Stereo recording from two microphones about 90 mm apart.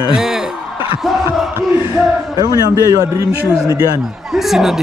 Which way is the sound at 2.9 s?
35° right (ahead or behind).